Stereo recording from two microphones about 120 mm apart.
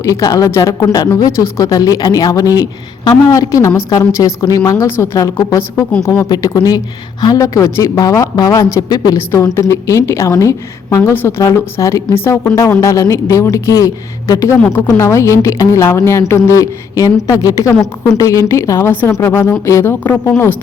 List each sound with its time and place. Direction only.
0.0 s speech: 30° left (ahead or behind)